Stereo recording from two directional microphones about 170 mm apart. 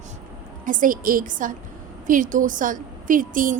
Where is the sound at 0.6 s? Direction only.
50° right (ahead or behind).